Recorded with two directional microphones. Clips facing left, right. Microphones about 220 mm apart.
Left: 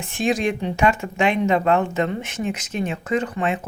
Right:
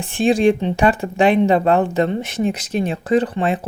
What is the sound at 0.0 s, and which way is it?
Speech, 30° right (ahead or behind).